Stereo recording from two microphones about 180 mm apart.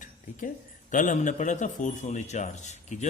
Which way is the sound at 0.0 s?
45° left (ahead or behind).